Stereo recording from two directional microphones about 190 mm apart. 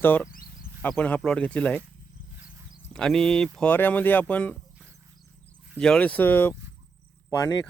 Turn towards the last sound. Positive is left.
turn(degrees=20)  # may be behind; listen again after turning